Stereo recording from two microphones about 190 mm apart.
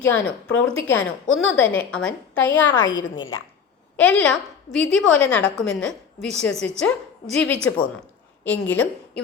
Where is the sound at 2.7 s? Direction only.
20° left (ahead or behind).